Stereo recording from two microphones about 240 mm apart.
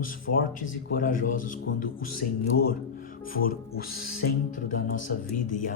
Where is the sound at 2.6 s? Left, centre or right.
Left.